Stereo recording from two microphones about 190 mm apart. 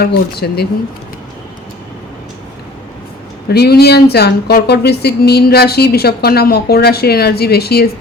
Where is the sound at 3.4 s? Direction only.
60° left (ahead or behind).